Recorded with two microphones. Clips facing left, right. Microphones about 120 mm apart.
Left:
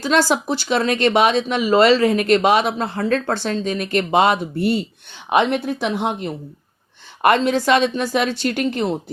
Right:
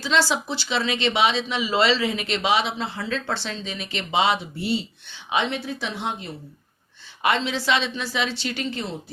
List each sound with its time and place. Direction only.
0.0 s a woman's voice: 50° left (ahead or behind)